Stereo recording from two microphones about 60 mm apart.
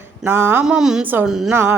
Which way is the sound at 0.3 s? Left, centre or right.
Right.